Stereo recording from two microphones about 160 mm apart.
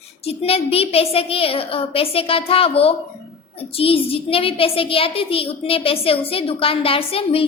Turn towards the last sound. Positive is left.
turn(degrees=35)  # may be behind; listen again after turning